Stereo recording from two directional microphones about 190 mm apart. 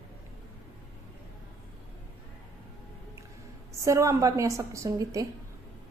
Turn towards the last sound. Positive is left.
turn(degrees=-15)  # may be behind; listen again after turning